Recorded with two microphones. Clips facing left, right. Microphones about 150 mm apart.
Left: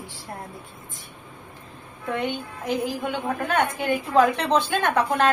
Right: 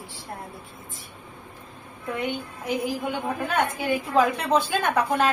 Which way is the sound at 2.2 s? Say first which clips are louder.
Right 1 dB; 10° right (ahead or behind).